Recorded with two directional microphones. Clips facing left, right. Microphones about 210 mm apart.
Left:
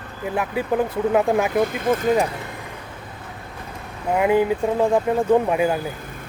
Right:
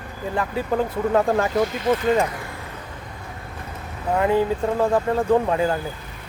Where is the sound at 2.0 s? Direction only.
15° left (ahead or behind).